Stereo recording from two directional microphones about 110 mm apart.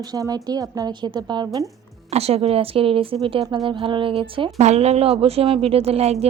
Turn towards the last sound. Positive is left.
turn(degrees=-70)  # may be behind; listen again after turning